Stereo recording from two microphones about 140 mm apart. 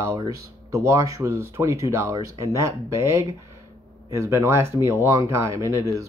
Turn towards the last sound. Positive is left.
turn(degrees=-20)  # may be behind; listen again after turning